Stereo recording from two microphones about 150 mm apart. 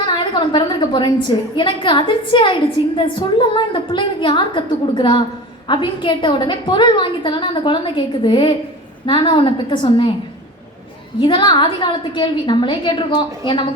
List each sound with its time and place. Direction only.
0.0 s a woman's voice: 30° left (ahead or behind)
11.2 s a woman's voice: 35° left (ahead or behind)